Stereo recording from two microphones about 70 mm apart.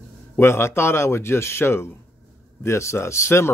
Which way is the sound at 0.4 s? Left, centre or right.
Left.